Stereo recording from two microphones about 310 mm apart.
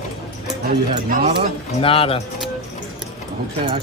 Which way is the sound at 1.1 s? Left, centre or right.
Right.